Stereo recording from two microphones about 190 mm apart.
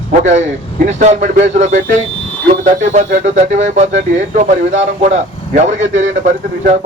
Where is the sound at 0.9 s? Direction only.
35° right (ahead or behind).